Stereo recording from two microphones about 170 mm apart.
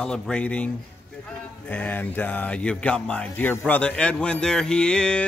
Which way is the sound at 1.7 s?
10° left (ahead or behind).